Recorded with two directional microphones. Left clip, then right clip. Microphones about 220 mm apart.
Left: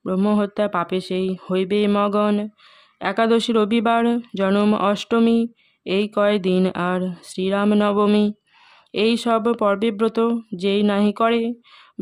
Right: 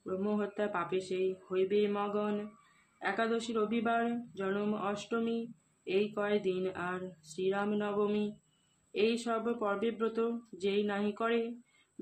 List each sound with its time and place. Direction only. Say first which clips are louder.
0.0 s speech: left 14 dB; 50° left (ahead or behind)